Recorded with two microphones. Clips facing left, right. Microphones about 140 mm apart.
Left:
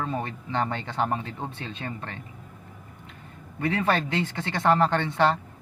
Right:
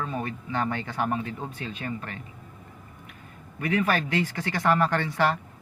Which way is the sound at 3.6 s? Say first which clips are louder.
Even; 25° left (ahead or behind).